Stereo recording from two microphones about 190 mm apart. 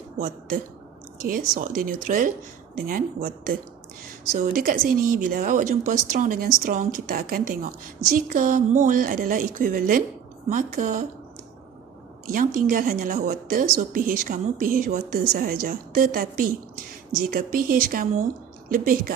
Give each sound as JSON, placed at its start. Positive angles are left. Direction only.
{"t": 1.3, "sound": "a woman's voice", "side_deg": -45}
{"t": 12.3, "sound": "a woman's voice", "side_deg": -45}